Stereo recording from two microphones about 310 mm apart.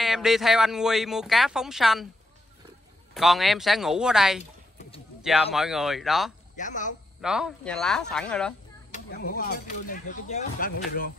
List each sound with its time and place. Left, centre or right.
0.0 s speech: centre
3.2 s speech: centre
6.5 s a woman's voice: left
7.2 s speech: centre
8.9 s speech: left